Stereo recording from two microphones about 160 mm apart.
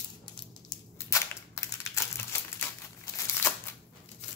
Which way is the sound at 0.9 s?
20° left (ahead or behind).